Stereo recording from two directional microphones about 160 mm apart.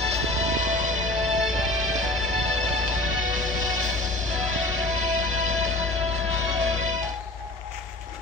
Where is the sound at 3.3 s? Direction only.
50° right (ahead or behind).